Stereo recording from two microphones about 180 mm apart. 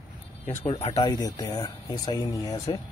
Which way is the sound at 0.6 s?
35° left (ahead or behind).